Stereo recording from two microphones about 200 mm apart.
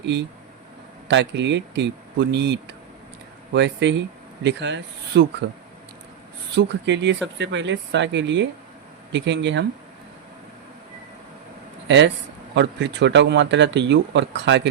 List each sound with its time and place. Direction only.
0.0 s speech: 60° right (ahead or behind)
6.6 s speech: 60° right (ahead or behind)
11.9 s speech: 60° right (ahead or behind)